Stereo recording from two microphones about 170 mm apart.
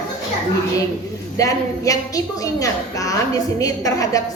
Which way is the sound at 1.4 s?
20° left (ahead or behind).